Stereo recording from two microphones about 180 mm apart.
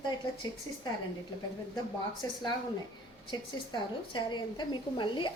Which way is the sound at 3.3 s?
25° left (ahead or behind).